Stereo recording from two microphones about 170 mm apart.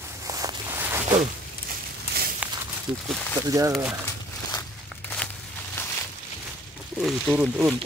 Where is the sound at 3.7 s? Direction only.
10° right (ahead or behind).